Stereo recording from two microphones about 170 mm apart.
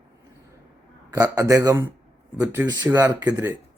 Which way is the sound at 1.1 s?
15° right (ahead or behind).